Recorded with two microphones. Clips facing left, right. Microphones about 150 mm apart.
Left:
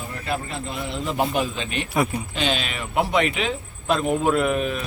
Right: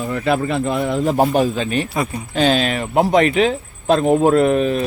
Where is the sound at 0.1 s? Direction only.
80° right.